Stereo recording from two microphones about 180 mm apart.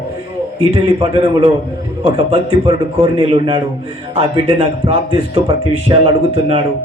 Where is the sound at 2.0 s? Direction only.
30° right (ahead or behind).